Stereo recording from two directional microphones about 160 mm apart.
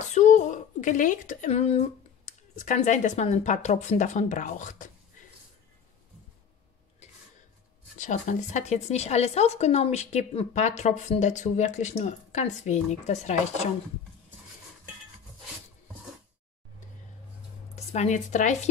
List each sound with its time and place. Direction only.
0.1 s a woman's voice: 50° left (ahead or behind)
8.0 s a woman's voice: 50° left (ahead or behind)
17.7 s speech: 45° left (ahead or behind)